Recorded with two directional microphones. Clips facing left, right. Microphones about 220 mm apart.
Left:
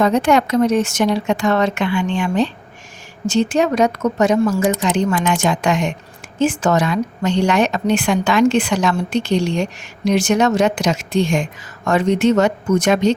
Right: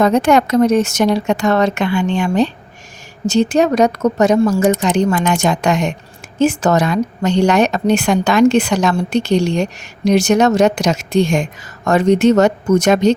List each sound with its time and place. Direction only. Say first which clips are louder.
0.0 s a woman's voice: right 2 dB; 45° right (ahead or behind)